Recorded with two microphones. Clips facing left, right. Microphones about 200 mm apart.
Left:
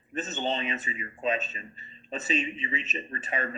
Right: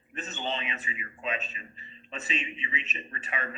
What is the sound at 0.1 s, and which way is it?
A man's voice, 40° left (ahead or behind).